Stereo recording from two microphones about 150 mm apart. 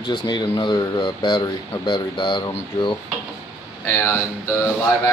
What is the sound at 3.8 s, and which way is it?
Speech, 15° left (ahead or behind).